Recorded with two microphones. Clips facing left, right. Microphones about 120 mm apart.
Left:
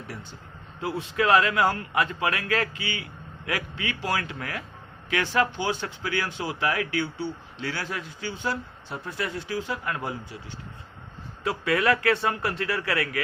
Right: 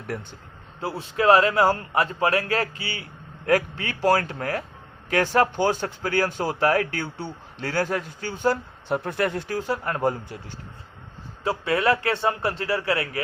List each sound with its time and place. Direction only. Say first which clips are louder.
0.1 s speech: right 13 dB; 50° right (ahead or behind)
0.8 s a man's voice: right 1 dB; 35° right (ahead or behind)
11.4 s speech: right 2 dB; 30° right (ahead or behind)